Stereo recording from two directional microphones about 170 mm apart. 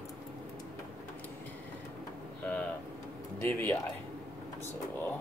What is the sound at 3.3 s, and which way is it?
Speech, 10° left (ahead or behind).